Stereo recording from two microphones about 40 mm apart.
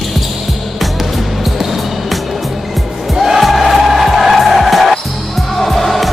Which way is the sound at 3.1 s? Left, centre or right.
Centre.